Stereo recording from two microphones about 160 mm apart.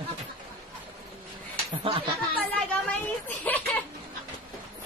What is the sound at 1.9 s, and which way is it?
Speech, 35° right (ahead or behind).